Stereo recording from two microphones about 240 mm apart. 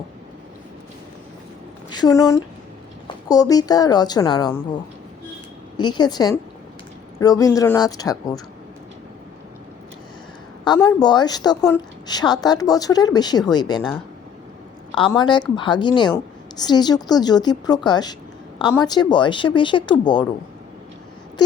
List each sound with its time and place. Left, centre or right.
1.9 s a woman's voice: centre
5.7 s a woman's voice: centre
10.8 s a woman's voice: centre
14.9 s a woman's voice: centre